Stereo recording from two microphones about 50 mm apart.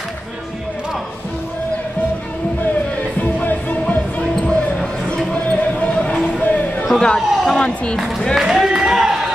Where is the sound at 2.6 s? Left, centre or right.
Left; by 5.2 s centre.